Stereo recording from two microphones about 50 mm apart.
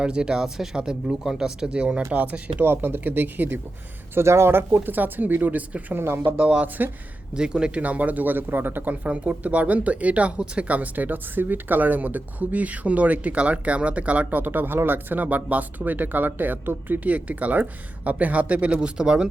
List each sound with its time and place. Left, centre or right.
0.0 s speech: centre
2.6 s speech: right
4.1 s speech: right
6.0 s speech: right
6.4 s speech: right
7.8 s speech: right
9.0 s speech: right